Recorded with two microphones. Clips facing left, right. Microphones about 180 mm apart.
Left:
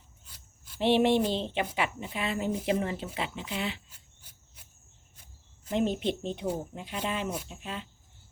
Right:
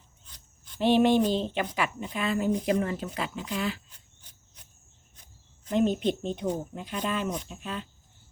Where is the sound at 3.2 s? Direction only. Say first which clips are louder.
Right 3 dB; 40° right (ahead or behind).